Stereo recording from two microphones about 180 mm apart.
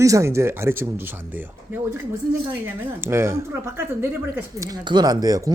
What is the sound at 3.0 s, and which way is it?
Speech, 15° right (ahead or behind).